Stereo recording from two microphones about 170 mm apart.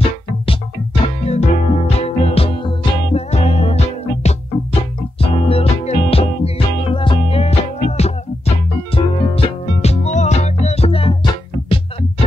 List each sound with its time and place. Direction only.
1.0 s music: 40° left (ahead or behind)